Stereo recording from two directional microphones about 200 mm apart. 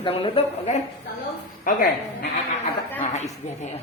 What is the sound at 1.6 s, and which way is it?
Speech, 45° left (ahead or behind).